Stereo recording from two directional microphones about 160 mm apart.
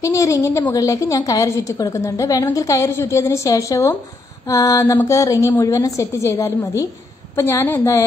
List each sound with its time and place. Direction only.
0.0 s a woman's voice: 20° left (ahead or behind)